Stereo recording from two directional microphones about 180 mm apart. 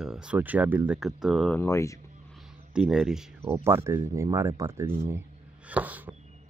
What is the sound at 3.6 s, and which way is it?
Speech, 15° right (ahead or behind).